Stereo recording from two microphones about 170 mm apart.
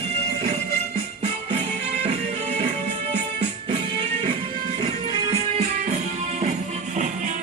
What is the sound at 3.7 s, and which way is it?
Music, 30° right (ahead or behind).